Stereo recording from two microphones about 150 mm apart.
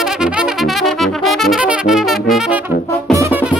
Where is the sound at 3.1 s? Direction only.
20° right (ahead or behind).